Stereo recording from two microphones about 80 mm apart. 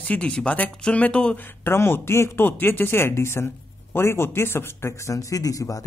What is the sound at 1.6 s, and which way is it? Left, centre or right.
Speech, left.